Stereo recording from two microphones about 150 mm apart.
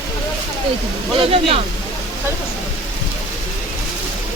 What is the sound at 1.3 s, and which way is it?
Speech, 40° right (ahead or behind).